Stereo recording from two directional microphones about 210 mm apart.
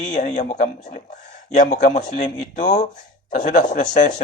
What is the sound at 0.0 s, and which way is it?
Speech, 35° left (ahead or behind).